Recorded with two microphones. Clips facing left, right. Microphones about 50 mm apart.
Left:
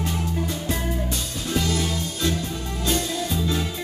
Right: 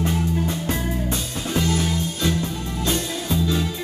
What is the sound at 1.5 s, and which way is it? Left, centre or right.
Music, right.